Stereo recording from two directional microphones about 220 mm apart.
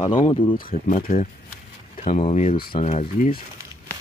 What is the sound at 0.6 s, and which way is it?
Speech, 40° left (ahead or behind).